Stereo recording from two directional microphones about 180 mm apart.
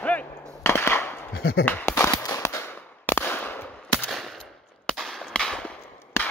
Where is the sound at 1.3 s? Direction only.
60° left (ahead or behind).